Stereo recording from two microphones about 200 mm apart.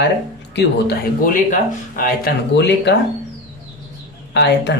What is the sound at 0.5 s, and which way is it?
Speech, 50° left (ahead or behind).